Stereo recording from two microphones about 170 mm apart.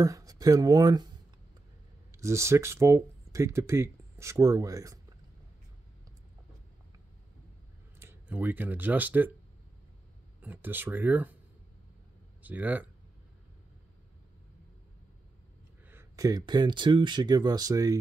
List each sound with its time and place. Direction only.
0.0 s speech: 20° right (ahead or behind)
2.1 s speech: 15° right (ahead or behind)
8.0 s speech: 15° right (ahead or behind)
10.4 s speech: 10° right (ahead or behind)
12.4 s speech: 10° right (ahead or behind)
15.9 s speech: 15° right (ahead or behind)